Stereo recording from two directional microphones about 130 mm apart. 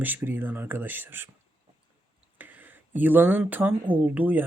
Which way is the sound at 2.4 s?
15° right (ahead or behind).